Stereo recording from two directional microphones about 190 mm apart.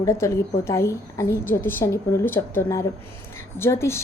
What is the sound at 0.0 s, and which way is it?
A woman's voice, 15° left (ahead or behind).